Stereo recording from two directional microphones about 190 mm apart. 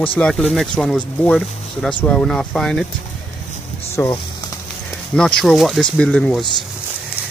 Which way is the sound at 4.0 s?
10° left (ahead or behind).